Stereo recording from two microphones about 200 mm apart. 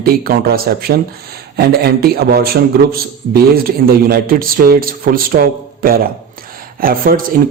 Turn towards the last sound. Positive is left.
turn(degrees=-45)  # may be behind; listen again after turning